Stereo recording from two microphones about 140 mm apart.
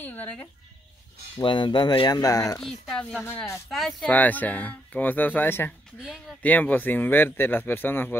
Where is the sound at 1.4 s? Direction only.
35° left (ahead or behind).